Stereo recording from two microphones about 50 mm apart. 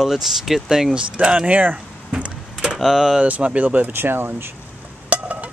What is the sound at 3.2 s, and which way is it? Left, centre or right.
Speech, right.